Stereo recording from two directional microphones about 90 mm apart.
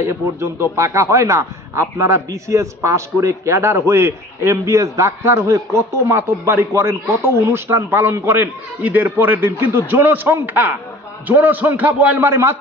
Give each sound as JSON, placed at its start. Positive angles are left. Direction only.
{"t": 0.0, "sound": "a man's voice", "side_deg": -30}
{"t": 12.3, "sound": "a man's voice", "side_deg": -30}